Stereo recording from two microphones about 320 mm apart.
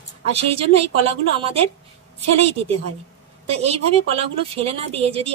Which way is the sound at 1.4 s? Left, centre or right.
Centre.